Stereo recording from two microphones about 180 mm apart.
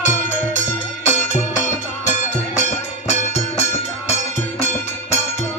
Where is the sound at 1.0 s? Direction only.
40° left (ahead or behind).